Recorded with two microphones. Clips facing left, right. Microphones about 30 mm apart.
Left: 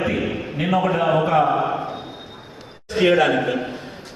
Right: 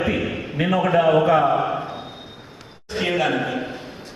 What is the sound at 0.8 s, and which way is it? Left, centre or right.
Speech, centre.